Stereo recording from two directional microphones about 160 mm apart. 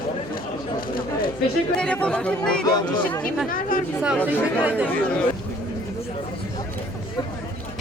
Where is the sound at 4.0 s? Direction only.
10° right (ahead or behind).